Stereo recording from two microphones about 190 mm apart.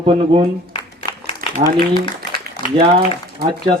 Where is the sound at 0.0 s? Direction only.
30° right (ahead or behind).